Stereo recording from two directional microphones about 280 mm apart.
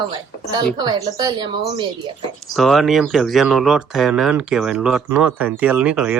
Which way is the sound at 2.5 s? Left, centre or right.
Centre.